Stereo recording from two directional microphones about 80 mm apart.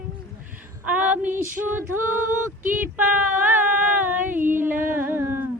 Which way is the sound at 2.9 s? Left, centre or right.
Right.